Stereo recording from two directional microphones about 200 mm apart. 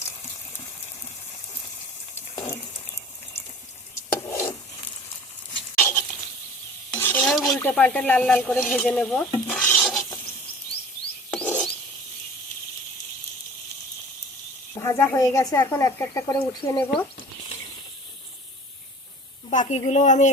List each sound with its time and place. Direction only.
4.3 s filing: 15° left (ahead or behind)
5.8 s stir: 10° left (ahead or behind)
11.3 s filing: 10° left (ahead or behind)
14.8 s speech: 15° left (ahead or behind)
19.5 s a woman's voice: 35° left (ahead or behind)